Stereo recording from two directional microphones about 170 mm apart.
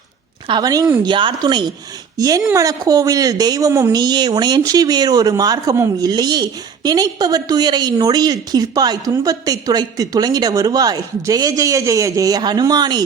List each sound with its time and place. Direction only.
0.4 s speech: 25° right (ahead or behind)